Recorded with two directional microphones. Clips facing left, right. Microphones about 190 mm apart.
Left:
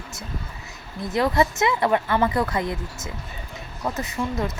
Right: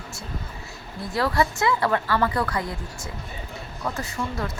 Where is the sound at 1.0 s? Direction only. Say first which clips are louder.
Left 3 dB; 20° left (ahead or behind).